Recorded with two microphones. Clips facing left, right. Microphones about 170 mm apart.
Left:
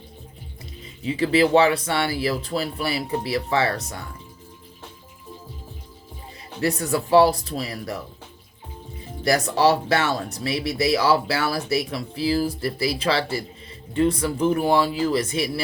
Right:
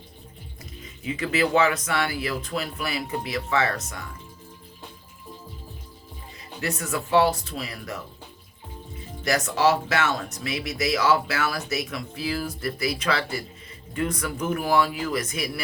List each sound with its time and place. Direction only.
1.0 s speech: 30° left (ahead or behind)
6.6 s speech: 35° left (ahead or behind)
9.2 s speech: 35° left (ahead or behind)